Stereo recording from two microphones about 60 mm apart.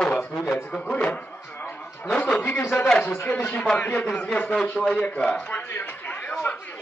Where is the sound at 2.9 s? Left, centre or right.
Centre.